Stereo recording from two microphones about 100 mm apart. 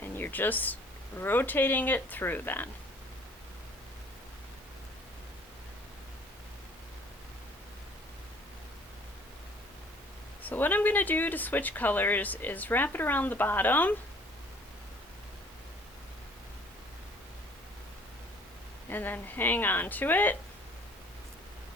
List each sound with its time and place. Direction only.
0.0 s a sound: 20° left (ahead or behind)
1.2 s speech: 20° left (ahead or behind)
10.4 s speech: 20° left (ahead or behind)
18.9 s speech: 20° left (ahead or behind)